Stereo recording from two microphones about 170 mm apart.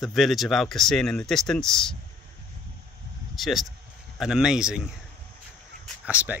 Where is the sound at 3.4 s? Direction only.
Centre (ahead or behind).